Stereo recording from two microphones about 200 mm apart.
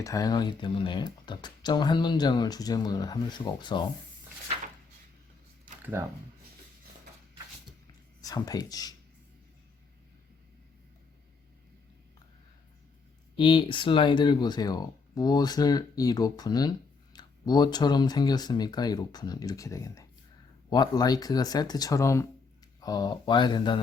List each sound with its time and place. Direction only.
0.0 s speech: 15° left (ahead or behind)
5.8 s speech: 10° right (ahead or behind)
8.2 s speech: 20° left (ahead or behind)
13.3 s speech: 25° left (ahead or behind)